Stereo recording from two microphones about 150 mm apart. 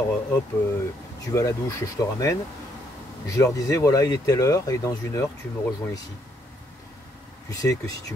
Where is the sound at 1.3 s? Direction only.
20° left (ahead or behind).